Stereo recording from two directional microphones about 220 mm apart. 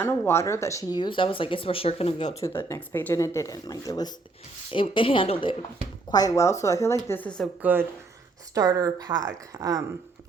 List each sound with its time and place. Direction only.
0.0 s speech: 10° left (ahead or behind); by 2.4 s 30° left (ahead or behind)
2.4 s speech: 10° left (ahead or behind)
7.6 s a woman's voice: 10° right (ahead or behind)